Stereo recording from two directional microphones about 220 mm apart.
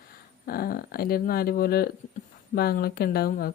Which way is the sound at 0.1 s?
40° left (ahead or behind).